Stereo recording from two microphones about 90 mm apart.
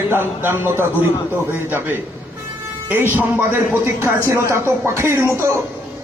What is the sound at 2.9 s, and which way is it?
A woman's voice, 25° right (ahead or behind).